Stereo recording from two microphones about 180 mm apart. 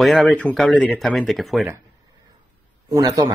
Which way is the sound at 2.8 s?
20° right (ahead or behind).